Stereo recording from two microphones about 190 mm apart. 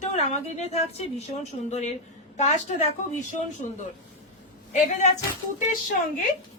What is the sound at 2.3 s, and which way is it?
Speech, 35° left (ahead or behind).